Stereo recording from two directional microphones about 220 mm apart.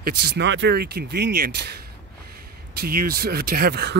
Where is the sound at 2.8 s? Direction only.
40° right (ahead or behind).